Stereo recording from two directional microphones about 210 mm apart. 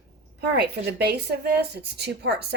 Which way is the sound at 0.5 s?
50° right (ahead or behind).